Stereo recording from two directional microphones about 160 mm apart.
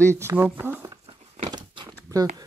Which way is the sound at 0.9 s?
25° right (ahead or behind).